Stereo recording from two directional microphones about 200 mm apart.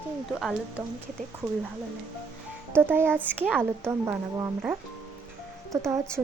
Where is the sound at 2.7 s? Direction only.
10° right (ahead or behind).